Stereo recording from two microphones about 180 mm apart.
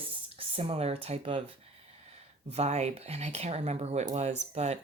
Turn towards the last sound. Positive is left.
turn(degrees=-40)  # may be behind; listen again after turning